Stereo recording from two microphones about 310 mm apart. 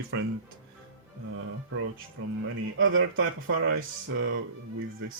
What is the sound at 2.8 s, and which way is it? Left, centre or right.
Speech, right.